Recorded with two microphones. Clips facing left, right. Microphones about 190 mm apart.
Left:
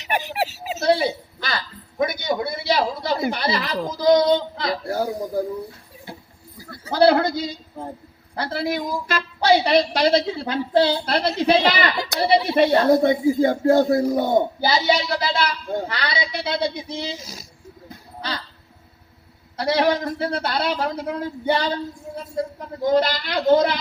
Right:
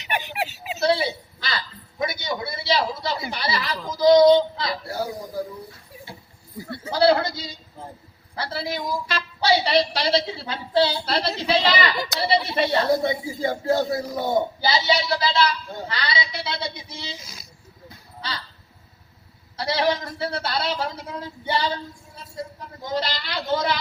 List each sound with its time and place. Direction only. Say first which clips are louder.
0.0 s speech: left 4 dB; 40° left (ahead or behind)
6.9 s a woman's voice: left 3 dB; 50° left (ahead or behind)
19.5 s a woman's voice: left 4 dB; 50° left (ahead or behind)
22.8 s a woman's voice: left 9 dB; 50° left (ahead or behind)